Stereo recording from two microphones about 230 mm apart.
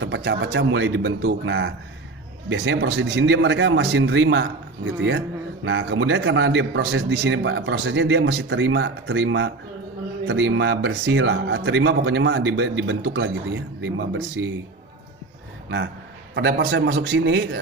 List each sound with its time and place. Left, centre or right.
0.0 s a man's voice: right
5.7 s a man's voice: right
16.3 s a man's voice: right